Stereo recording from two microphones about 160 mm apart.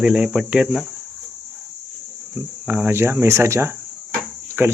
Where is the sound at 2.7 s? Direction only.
10° right (ahead or behind).